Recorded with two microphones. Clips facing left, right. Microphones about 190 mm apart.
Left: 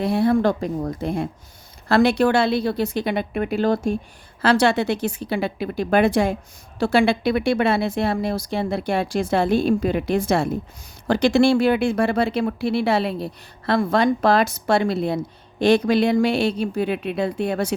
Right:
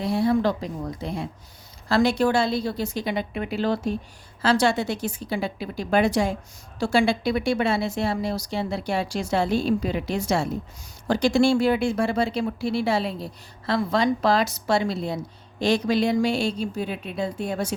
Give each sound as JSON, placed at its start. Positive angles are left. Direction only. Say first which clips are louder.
{"t": 0.0, "sound": "speech", "louder": "left 3 dB", "side_deg": 60}
{"t": 4.4, "sound": "speech", "louder": "left 3 dB", "side_deg": 65}